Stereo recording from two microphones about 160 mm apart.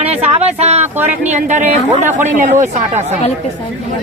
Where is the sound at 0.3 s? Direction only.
40° right (ahead or behind).